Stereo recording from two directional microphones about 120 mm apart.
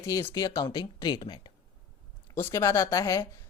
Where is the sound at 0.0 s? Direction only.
25° left (ahead or behind).